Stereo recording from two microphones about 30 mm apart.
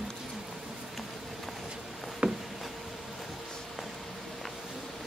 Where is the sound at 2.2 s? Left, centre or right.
Right.